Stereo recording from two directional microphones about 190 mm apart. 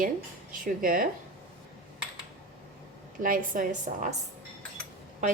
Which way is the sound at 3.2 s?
45° right (ahead or behind).